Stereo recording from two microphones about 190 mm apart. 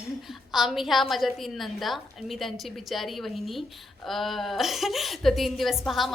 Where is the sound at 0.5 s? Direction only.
Centre (ahead or behind).